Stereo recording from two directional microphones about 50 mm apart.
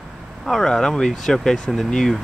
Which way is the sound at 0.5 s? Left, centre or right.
Centre.